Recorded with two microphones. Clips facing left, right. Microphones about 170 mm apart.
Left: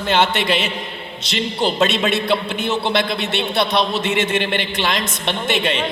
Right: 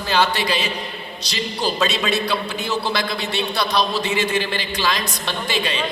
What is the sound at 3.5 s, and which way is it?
A man's voice, 25° left (ahead or behind).